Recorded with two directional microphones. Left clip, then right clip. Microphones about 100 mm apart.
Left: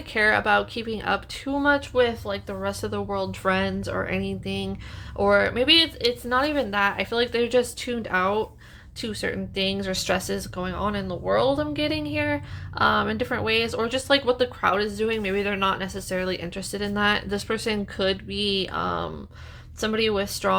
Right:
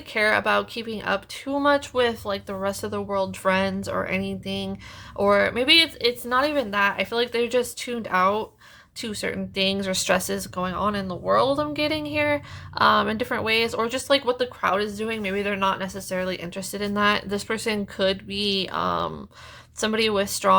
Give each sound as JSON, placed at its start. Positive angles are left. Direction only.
{"t": 0.1, "sound": "speech", "side_deg": -30}
{"t": 1.5, "sound": "speech", "side_deg": -45}
{"t": 2.8, "sound": "speech", "side_deg": -30}
{"t": 5.1, "sound": "speech", "side_deg": -45}
{"t": 19.8, "sound": "speech", "side_deg": -60}